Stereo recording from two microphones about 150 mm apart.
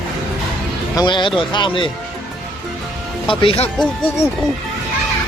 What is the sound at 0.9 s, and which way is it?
Speech, 30° left (ahead or behind).